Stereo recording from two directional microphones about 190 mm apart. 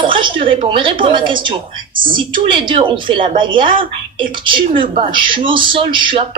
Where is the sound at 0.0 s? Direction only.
25° right (ahead or behind).